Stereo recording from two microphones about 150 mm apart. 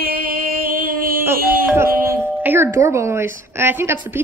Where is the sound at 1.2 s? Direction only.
15° right (ahead or behind).